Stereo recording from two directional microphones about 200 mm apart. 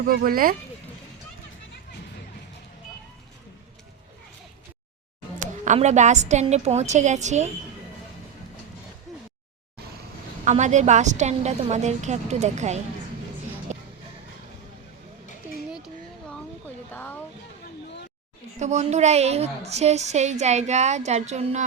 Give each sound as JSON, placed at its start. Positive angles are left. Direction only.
{"t": 0.1, "sound": "speech", "side_deg": -45}
{"t": 5.4, "sound": "a woman's voice", "side_deg": -35}
{"t": 10.4, "sound": "a woman's voice", "side_deg": -35}
{"t": 13.7, "sound": "music", "side_deg": -35}
{"t": 16.9, "sound": "a sound", "side_deg": 10}
{"t": 18.6, "sound": "a woman's voice", "side_deg": -35}